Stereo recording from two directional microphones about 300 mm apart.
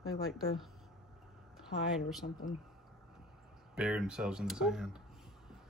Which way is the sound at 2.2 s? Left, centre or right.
Left.